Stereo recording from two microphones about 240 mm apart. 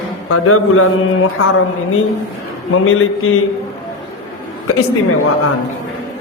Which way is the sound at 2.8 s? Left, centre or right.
Left.